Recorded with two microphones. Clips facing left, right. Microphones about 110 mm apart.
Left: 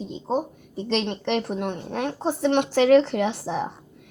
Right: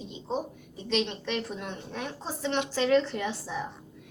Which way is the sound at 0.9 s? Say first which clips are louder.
Left 5 dB; 60° left (ahead or behind).